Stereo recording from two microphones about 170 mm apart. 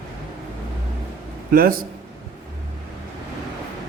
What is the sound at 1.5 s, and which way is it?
Speech, 55° right (ahead or behind).